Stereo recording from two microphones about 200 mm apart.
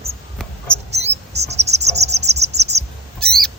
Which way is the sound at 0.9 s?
35° right (ahead or behind).